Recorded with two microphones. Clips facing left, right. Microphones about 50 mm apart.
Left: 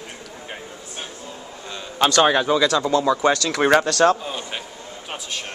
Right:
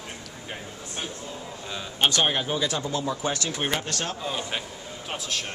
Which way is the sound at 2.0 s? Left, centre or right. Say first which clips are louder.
Left 7 dB; left.